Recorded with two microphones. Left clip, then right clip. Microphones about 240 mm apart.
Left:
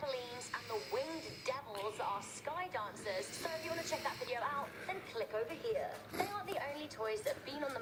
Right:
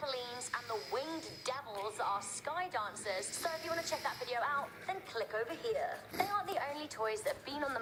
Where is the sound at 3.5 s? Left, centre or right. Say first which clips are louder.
Right 5 dB; centre.